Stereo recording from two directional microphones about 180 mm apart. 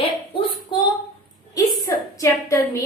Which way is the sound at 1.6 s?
20° left (ahead or behind).